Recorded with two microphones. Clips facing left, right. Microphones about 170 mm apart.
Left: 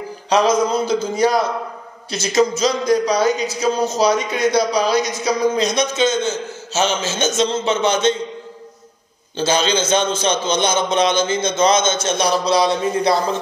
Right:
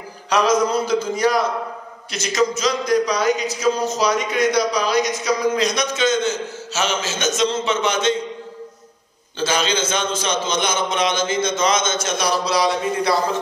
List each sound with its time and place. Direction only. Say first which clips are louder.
0.3 s a man's voice: left 2 dB; 25° left (ahead or behind)
9.4 s a man's voice: left 3 dB; 30° left (ahead or behind)